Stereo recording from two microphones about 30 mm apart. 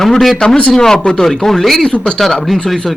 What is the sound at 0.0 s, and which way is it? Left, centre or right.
Speech, centre.